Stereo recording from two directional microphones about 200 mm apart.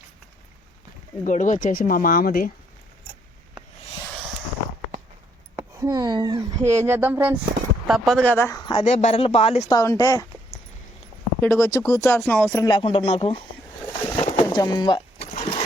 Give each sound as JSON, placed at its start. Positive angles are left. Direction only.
{"t": 1.2, "sound": "speech", "side_deg": 40}
{"t": 5.5, "sound": "speech", "side_deg": -20}
{"t": 9.6, "sound": "speech", "side_deg": 15}
{"t": 11.3, "sound": "speech", "side_deg": 15}
{"t": 14.2, "sound": "bird", "side_deg": 30}
{"t": 14.4, "sound": "a sound", "side_deg": 20}